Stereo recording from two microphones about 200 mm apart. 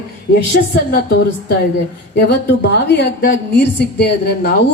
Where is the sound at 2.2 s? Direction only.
55° left (ahead or behind).